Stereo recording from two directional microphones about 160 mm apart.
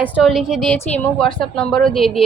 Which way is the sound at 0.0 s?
5° right (ahead or behind).